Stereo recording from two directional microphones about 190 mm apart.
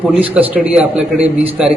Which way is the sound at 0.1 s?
10° right (ahead or behind).